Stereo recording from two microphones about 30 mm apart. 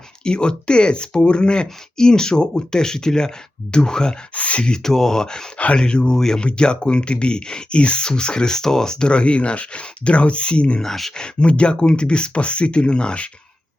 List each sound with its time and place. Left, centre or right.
0.3 s speech: left
4.4 s speech: left
4.8 s speech: centre
6.4 s speech: left